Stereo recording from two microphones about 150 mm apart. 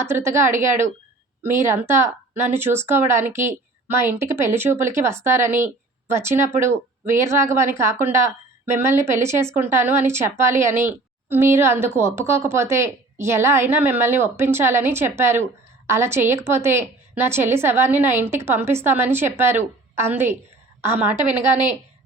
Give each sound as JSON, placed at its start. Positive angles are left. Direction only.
{"t": 0.0, "sound": "speech", "side_deg": -15}